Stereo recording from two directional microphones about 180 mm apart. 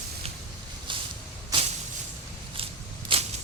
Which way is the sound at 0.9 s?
25° right (ahead or behind).